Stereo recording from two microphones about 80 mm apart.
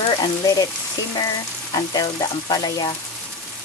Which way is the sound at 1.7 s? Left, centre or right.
Left.